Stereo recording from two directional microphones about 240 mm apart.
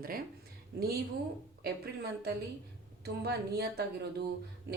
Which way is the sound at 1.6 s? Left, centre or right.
Right.